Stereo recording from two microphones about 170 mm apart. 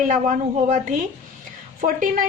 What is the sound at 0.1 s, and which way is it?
Speech, 50° right (ahead or behind).